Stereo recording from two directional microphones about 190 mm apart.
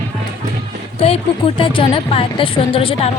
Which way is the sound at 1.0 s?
30° left (ahead or behind).